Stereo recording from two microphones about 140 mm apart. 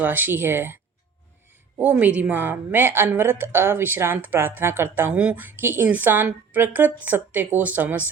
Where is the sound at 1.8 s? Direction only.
10° right (ahead or behind).